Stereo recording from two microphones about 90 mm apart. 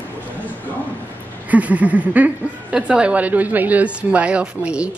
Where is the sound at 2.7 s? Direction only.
10° right (ahead or behind).